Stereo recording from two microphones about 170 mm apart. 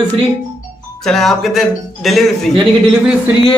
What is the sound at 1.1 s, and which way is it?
A man's voice, centre (ahead or behind).